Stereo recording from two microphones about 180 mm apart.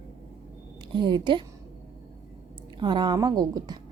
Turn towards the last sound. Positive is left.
turn(degrees=-20)  # may be behind; listen again after turning